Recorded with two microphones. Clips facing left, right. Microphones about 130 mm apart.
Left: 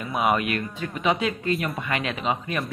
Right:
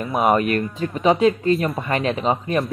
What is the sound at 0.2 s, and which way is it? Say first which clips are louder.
A man's voice: right 5 dB; 35° right (ahead or behind).